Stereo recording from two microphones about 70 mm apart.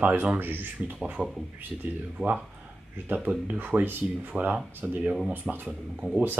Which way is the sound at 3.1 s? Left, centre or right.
Right.